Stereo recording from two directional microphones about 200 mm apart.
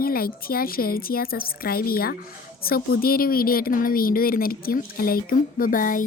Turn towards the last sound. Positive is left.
turn(degrees=45)  # may be behind; listen again after turning